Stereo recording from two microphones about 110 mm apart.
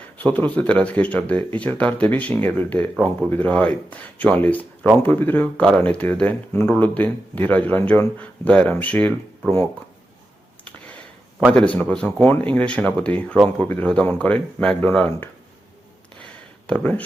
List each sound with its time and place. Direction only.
0.2 s speech: 15° left (ahead or behind)
11.5 s speech: 10° left (ahead or behind)
16.6 s speech: 15° left (ahead or behind)